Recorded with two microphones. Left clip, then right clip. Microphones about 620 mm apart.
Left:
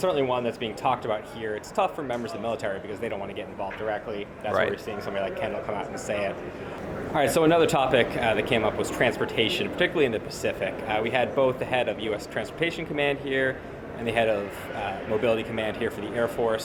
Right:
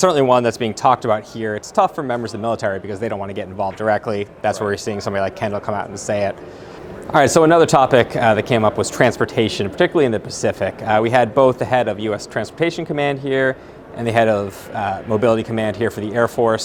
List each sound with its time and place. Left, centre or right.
0.0 s speech: right